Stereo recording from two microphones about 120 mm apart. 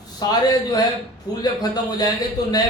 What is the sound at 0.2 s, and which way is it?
A man's voice, 30° left (ahead or behind).